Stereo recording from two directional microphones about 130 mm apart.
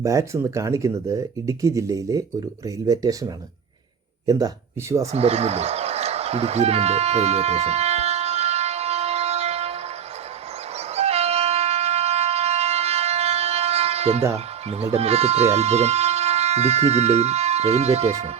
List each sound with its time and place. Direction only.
0.0 s speech: 25° right (ahead or behind)
4.3 s speech: 30° right (ahead or behind)
5.1 s a sound: 50° right (ahead or behind)
10.9 s shofar: 55° right (ahead or behind)
14.3 s speech: 50° right (ahead or behind)